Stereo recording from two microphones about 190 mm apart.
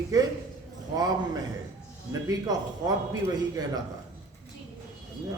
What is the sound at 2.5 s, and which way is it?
Speech, 20° right (ahead or behind).